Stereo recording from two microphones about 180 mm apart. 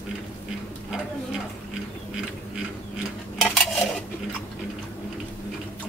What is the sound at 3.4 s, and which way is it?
Cutlery, centre (ahead or behind).